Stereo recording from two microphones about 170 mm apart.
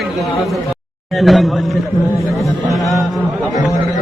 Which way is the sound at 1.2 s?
Centre (ahead or behind).